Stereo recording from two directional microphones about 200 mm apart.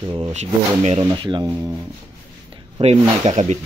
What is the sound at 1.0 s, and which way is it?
Speech, 25° right (ahead or behind).